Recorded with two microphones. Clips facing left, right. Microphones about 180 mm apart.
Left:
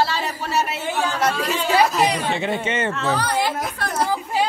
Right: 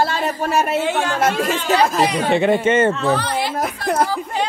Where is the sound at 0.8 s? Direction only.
80° right.